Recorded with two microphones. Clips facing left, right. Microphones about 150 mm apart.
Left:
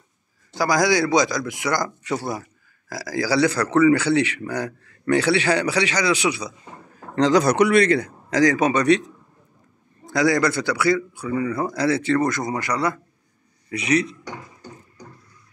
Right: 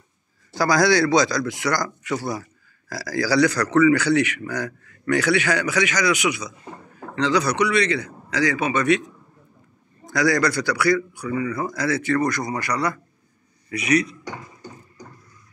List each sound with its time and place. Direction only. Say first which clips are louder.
0.5 s a man's voice: right 1 dB; 15° left (ahead or behind); by 6.5 s 30° left (ahead or behind)
7.2 s a man's voice: left 4 dB; 45° left (ahead or behind)